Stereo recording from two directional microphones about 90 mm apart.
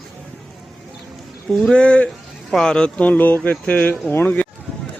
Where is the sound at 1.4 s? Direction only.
5° left (ahead or behind); by 4.4 s 20° left (ahead or behind).